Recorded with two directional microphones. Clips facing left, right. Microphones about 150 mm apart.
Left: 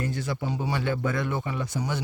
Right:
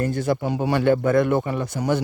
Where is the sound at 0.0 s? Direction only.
50° right (ahead or behind).